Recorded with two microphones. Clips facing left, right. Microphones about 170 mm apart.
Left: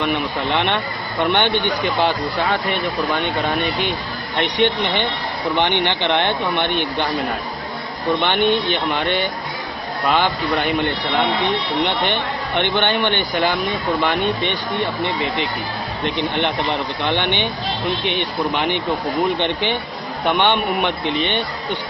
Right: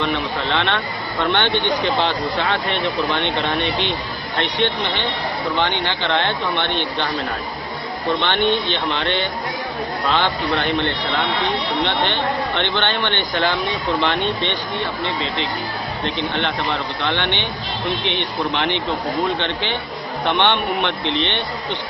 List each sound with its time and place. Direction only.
0.0 s speech: 15° left (ahead or behind)
8.2 s speech: 10° left (ahead or behind)
19.3 s speech: 15° left (ahead or behind)